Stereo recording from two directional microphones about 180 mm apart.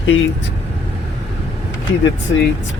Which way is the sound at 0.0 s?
90° left.